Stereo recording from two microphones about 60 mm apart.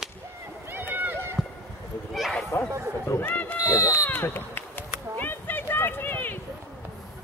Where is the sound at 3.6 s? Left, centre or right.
Left.